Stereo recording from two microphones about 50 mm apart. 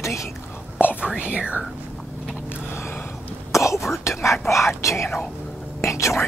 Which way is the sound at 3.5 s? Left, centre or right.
Left.